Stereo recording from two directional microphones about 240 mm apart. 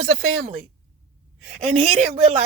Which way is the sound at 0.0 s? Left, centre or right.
Right.